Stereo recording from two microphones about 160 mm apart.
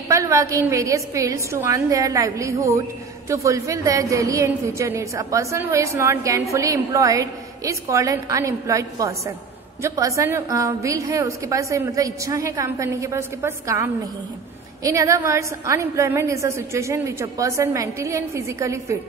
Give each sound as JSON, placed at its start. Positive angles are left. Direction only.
{"t": 0.1, "sound": "a woman's voice", "side_deg": -20}